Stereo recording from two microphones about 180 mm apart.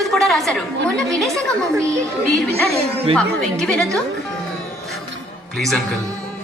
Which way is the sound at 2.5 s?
35° right (ahead or behind).